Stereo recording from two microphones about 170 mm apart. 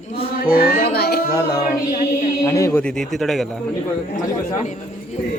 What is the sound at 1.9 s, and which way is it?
Chant, 45° left (ahead or behind).